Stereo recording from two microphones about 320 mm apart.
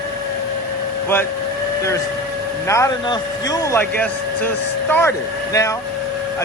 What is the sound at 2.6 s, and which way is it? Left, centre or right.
Speech, centre.